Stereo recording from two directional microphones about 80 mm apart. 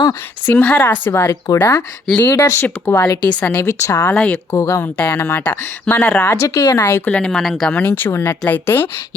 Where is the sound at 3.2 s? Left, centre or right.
Centre.